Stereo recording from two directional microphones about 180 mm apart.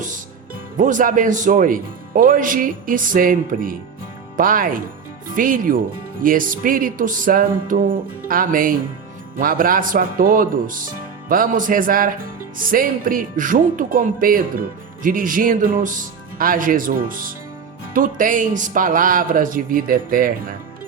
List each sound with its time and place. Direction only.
0.8 s speech: 45° right (ahead or behind)